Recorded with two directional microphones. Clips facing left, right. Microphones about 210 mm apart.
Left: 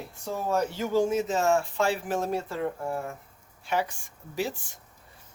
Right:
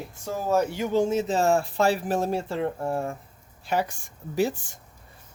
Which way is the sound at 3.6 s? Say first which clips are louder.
Right 2 dB; 40° right (ahead or behind).